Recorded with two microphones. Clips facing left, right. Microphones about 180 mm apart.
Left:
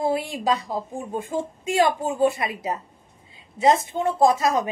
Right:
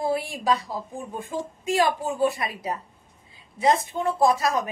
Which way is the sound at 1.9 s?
20° left (ahead or behind).